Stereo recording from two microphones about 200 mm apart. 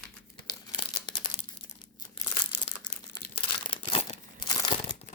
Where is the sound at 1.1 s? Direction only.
25° left (ahead or behind).